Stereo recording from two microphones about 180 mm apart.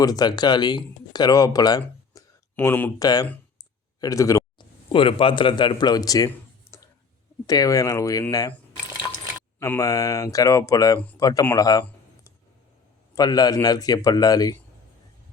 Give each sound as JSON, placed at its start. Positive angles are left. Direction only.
{"t": 0.0, "sound": "a man's voice", "side_deg": 20}
{"t": 1.8, "sound": "a sound", "side_deg": 10}
{"t": 4.0, "sound": "a man's voice", "side_deg": 20}